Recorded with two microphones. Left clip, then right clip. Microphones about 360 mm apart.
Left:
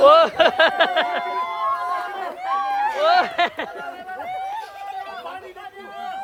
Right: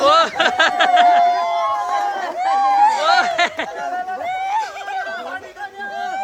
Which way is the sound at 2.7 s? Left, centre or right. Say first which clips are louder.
Right 9 dB; centre.